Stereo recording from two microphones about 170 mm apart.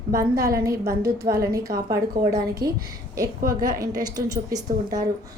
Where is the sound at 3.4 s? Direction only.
55° right (ahead or behind).